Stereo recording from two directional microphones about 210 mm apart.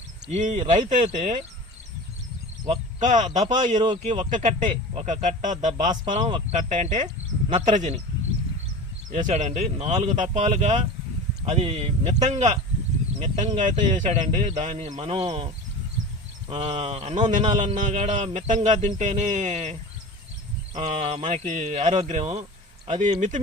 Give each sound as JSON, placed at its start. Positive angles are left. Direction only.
{"t": 0.3, "sound": "a man's voice", "side_deg": -35}
{"t": 2.6, "sound": "a man's voice", "side_deg": -35}
{"t": 3.8, "sound": "speech", "side_deg": -25}
{"t": 4.3, "sound": "a man's voice", "side_deg": -35}
{"t": 9.0, "sound": "a man's voice", "side_deg": -35}
{"t": 20.7, "sound": "a man's voice", "side_deg": -35}